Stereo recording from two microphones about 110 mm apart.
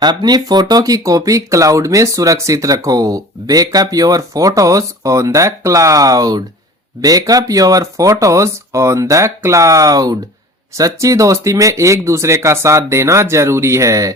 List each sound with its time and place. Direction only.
0.0 s speech: 40° right (ahead or behind)